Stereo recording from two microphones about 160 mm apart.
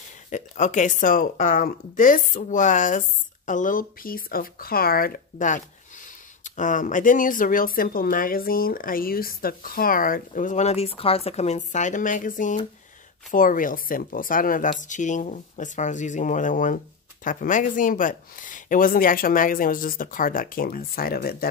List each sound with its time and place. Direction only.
0.3 s speech: 50° left (ahead or behind); by 21.5 s 70° left (ahead or behind)